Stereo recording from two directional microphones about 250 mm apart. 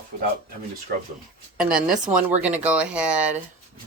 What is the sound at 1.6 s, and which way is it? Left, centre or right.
Speech, centre.